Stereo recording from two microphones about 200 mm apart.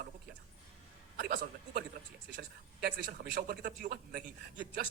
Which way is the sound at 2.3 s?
55° right (ahead or behind).